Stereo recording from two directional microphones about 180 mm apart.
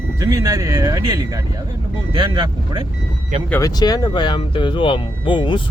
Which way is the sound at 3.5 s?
20° left (ahead or behind).